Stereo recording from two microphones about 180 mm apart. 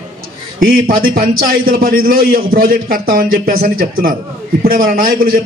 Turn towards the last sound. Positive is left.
turn(degrees=-50)  # may be behind; listen again after turning